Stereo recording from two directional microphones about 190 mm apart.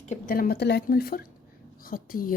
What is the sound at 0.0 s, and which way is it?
Speech, 45° left (ahead or behind).